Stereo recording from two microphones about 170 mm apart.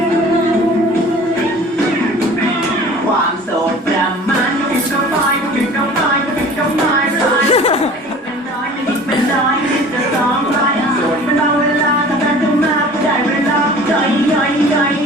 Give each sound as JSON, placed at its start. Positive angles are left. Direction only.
{"t": 7.5, "sound": "chuckle", "side_deg": 35}